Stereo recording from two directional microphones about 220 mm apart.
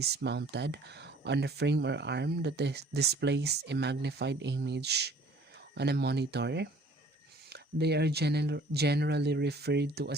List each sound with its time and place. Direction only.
0.0 s speech: 50° right (ahead or behind)